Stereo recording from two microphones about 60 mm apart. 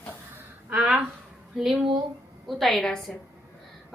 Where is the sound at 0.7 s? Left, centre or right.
Centre.